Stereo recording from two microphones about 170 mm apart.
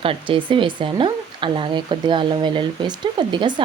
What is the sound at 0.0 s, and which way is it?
Speech, 30° right (ahead or behind).